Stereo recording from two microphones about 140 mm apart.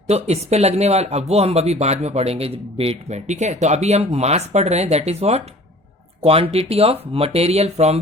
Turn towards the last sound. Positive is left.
turn(degrees=-50)  # may be behind; listen again after turning